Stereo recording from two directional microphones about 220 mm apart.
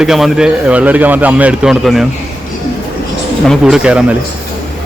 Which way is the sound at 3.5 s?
5° right (ahead or behind).